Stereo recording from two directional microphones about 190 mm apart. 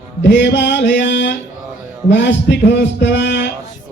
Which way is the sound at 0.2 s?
70° left (ahead or behind).